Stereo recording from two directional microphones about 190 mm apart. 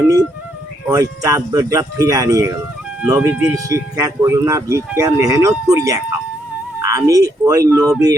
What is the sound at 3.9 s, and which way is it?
Speech, 20° right (ahead or behind).